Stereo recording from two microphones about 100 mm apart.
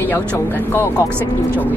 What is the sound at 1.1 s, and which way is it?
Speech, 20° right (ahead or behind).